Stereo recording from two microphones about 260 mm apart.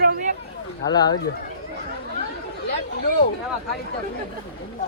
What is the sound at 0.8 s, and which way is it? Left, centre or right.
Speech, centre.